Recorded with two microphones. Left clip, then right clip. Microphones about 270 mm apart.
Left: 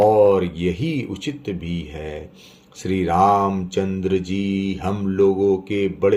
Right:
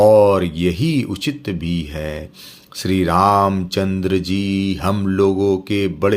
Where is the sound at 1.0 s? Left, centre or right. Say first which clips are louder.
Right 5 dB; right.